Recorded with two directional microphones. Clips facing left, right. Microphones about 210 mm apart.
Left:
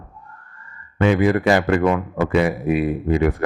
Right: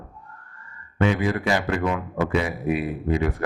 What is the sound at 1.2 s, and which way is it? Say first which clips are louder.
A man's voice: left 7 dB; 60° left (ahead or behind).